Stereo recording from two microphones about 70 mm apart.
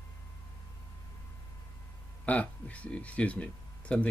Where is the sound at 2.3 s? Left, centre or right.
Left.